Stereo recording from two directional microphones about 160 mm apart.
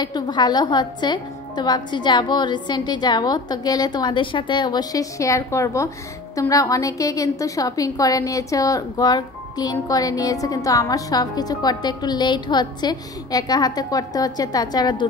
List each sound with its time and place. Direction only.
0.0 s a woman's voice: 25° left (ahead or behind)